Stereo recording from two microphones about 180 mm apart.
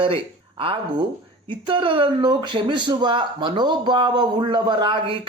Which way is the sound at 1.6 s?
30° right (ahead or behind).